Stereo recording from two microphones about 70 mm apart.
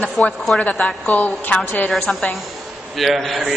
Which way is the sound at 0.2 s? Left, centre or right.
Centre.